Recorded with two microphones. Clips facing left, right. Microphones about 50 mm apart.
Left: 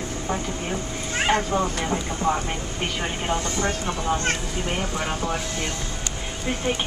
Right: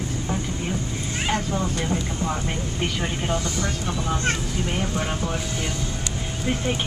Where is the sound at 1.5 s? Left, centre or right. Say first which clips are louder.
Left 2 dB; left.